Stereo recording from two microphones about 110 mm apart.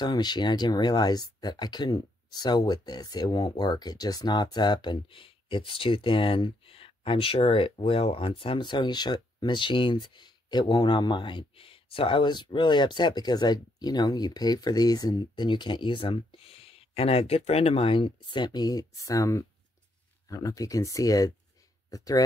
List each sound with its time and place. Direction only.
0.0 s speech: 40° left (ahead or behind)